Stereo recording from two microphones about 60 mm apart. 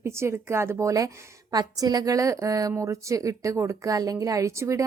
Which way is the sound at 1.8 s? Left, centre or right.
Right.